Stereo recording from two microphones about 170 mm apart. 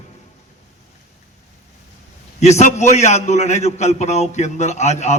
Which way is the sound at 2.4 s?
40° left (ahead or behind).